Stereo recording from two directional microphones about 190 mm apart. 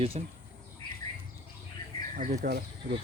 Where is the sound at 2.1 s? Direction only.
45° right (ahead or behind).